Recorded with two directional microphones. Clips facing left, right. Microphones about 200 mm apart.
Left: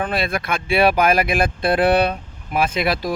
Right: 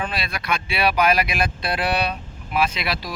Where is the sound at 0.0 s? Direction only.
50° left (ahead or behind).